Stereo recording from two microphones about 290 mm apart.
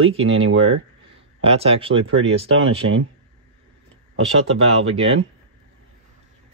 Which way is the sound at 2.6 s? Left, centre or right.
Right.